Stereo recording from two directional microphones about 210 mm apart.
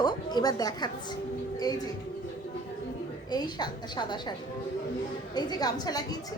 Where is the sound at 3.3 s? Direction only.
20° left (ahead or behind).